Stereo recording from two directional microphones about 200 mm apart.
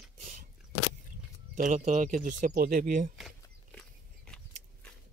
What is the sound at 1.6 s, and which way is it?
Speech, 40° right (ahead or behind).